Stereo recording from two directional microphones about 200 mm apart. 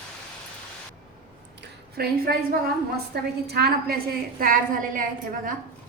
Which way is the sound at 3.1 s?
55° right (ahead or behind).